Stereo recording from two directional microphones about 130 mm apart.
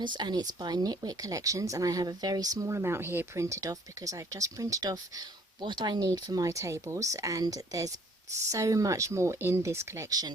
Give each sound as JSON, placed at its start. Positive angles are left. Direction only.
{"t": 0.0, "sound": "speech", "side_deg": -35}